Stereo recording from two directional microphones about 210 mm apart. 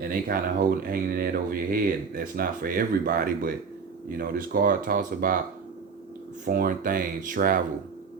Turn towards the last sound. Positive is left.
turn(degrees=-40)  # may be behind; listen again after turning